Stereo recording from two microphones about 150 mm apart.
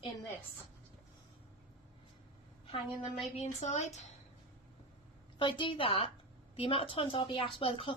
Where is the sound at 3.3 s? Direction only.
50° left (ahead or behind).